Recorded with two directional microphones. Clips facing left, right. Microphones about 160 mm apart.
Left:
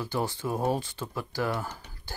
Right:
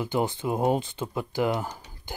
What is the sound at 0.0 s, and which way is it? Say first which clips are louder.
Speech: right 4 dB; 20° right (ahead or behind).